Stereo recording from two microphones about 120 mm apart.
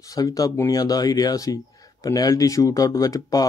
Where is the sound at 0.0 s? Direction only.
30° left (ahead or behind).